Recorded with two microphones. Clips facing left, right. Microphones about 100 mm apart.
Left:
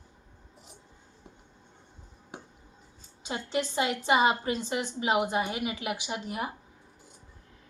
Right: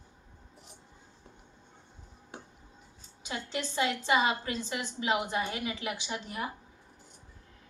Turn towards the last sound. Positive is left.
turn(degrees=20)  # may be behind; listen again after turning